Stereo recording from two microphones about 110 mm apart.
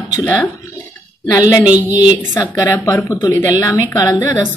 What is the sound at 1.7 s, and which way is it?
Speech, 15° right (ahead or behind).